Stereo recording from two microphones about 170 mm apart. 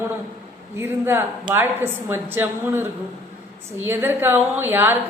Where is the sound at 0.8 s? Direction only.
15° right (ahead or behind).